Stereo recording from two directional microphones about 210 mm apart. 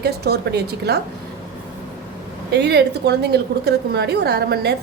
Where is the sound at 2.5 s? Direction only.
50° right (ahead or behind).